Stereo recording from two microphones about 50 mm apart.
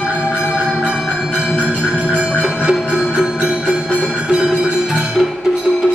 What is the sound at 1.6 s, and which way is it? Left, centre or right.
Music, right.